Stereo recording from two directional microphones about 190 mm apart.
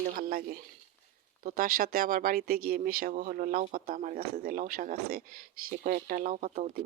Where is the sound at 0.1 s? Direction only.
50° right (ahead or behind).